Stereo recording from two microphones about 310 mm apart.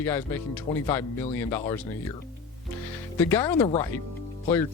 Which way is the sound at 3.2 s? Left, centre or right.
Centre.